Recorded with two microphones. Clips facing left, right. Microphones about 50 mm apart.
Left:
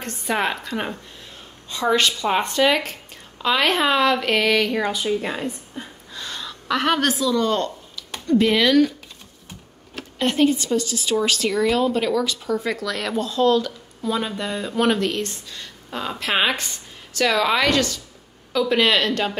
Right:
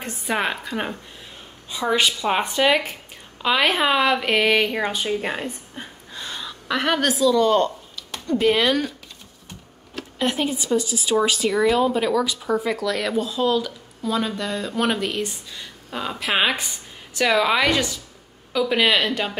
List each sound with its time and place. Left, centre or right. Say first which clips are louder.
0.0 s speech: left 1 dB; centre
4.9 s a woman's voice: left 1 dB; right
6.1 s a sound: even; centre
7.3 s speech: right 3 dB; centre
9.9 s speech: left 3 dB; centre
14.1 s a woman's voice: right 1 dB; centre